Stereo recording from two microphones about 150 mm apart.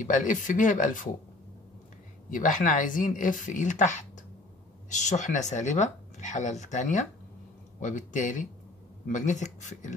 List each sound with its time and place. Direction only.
0.0 s speech: 55° left (ahead or behind)
2.3 s speech: 60° left (ahead or behind)